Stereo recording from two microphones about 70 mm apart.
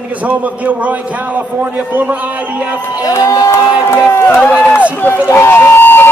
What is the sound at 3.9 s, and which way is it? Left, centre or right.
Speech, left.